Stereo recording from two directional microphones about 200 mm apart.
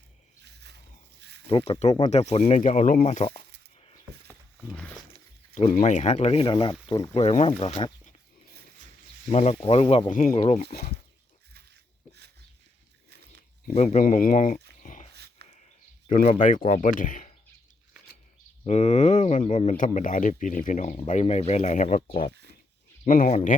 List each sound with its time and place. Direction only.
0.4 s a sound: 55° right (ahead or behind)
1.2 s snake: 55° right (ahead or behind)
1.5 s speech: 25° left (ahead or behind)
3.8 s a sound: 30° left (ahead or behind)
5.5 s speech: 40° left (ahead or behind); by 7.1 s 15° left (ahead or behind)
7.1 s speech: 30° left (ahead or behind)
9.3 s speech: 35° left (ahead or behind)
13.7 s speech: 40° left (ahead or behind)
14.8 s dog: 40° left (ahead or behind)
15.1 s dog: 55° right (ahead or behind)
16.0 s speech: 40° left (ahead or behind)
18.6 s speech: 35° left (ahead or behind)
23.0 s speech: 40° left (ahead or behind)